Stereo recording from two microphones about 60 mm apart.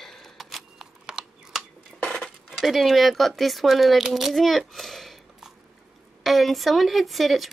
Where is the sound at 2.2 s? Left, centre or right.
Centre.